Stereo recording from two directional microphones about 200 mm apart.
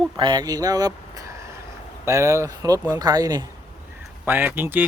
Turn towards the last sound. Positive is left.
turn(degrees=-10)  # may be behind; listen again after turning